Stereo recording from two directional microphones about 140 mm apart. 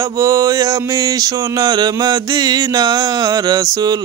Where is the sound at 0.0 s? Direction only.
25° right (ahead or behind).